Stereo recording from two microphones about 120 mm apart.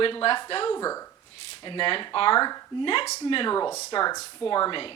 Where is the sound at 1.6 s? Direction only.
45° left (ahead or behind).